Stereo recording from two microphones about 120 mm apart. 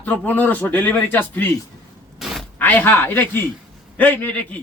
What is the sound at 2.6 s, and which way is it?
A man's voice, 15° left (ahead or behind).